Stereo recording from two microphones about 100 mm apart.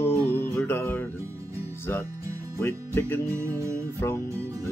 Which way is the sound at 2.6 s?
25° left (ahead or behind).